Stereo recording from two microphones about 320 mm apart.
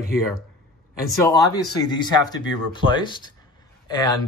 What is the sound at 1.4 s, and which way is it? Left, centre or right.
Speech, centre.